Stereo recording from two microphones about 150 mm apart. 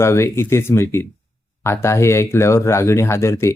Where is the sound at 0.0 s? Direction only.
20° left (ahead or behind).